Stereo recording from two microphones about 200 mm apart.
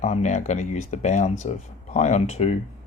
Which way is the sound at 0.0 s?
35° left (ahead or behind).